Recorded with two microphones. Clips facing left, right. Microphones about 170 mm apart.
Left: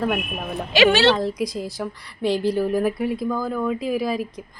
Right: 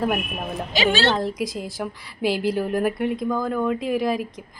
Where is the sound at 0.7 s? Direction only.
70° left (ahead or behind).